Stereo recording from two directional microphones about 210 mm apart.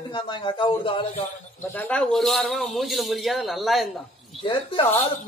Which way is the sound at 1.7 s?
5° left (ahead or behind).